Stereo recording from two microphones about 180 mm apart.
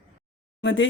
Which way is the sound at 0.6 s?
90° left.